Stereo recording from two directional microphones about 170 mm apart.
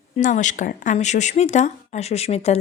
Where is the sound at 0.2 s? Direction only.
45° left (ahead or behind).